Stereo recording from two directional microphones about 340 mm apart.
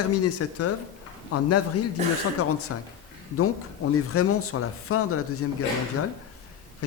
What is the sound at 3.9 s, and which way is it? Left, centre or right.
Speech, left.